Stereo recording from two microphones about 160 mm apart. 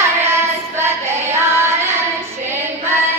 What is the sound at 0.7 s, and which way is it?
Child singing, 15° right (ahead or behind).